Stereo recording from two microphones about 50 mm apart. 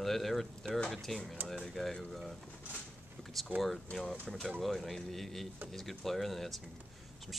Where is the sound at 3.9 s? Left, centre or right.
Centre.